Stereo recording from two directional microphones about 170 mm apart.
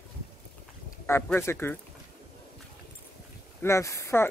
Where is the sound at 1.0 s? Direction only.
15° left (ahead or behind).